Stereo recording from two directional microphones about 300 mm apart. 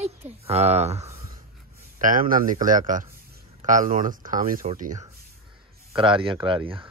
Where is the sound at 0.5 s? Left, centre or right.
Right.